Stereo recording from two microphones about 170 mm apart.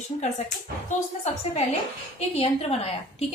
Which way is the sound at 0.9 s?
40° left (ahead or behind).